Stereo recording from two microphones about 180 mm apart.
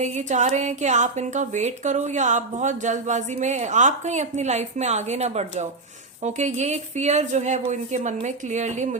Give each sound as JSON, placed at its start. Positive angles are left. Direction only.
{"t": 0.0, "sound": "speech", "side_deg": -40}